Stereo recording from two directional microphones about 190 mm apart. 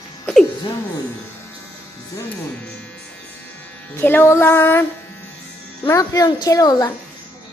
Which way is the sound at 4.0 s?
10° left (ahead or behind).